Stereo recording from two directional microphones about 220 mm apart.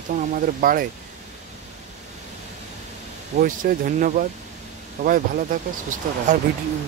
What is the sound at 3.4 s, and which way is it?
Speech, 35° right (ahead or behind).